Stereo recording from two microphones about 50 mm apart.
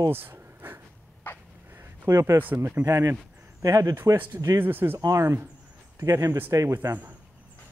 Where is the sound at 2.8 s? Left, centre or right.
Right.